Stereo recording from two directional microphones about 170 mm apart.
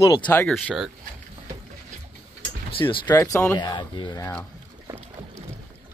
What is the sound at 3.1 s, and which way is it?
Speech, 20° left (ahead or behind).